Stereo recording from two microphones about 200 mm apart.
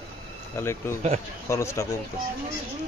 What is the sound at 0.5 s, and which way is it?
Speech, 10° left (ahead or behind).